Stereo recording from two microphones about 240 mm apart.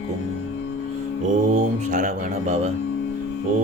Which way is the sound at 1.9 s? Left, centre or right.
Right.